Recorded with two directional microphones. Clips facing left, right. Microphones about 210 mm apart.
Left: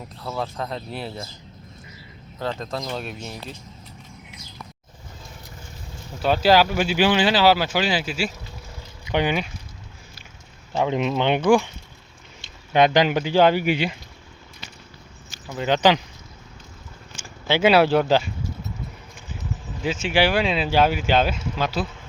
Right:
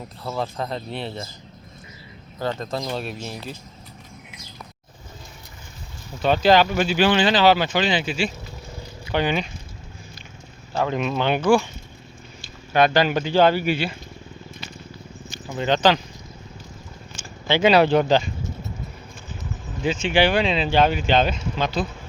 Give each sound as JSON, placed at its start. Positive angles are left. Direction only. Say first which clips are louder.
{"t": 0.2, "sound": "speech", "louder": "right 1 dB", "side_deg": 0}
{"t": 2.4, "sound": "speech", "louder": "right 2 dB", "side_deg": 0}
{"t": 6.2, "sound": "speech", "louder": "right 1 dB", "side_deg": 5}
{"t": 10.8, "sound": "speech", "louder": "left 1 dB", "side_deg": 20}
{"t": 15.3, "sound": "speech", "louder": "even", "side_deg": 0}
{"t": 17.2, "sound": "a sound", "louder": "right 1 dB", "side_deg": 5}
{"t": 19.8, "sound": "speech", "louder": "right 1 dB", "side_deg": 5}